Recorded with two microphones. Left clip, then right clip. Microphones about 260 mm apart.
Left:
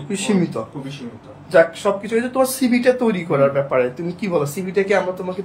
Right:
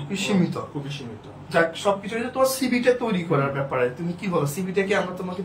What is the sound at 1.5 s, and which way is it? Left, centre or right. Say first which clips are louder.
Speech: left 6 dB; centre.